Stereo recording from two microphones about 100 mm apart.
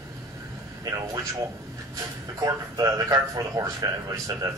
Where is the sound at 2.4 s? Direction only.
40° right (ahead or behind).